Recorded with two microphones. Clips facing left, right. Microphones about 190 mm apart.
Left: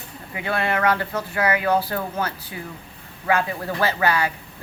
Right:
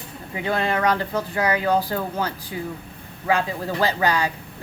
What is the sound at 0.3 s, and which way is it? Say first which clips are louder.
Speech: right 1 dB; 20° right (ahead or behind).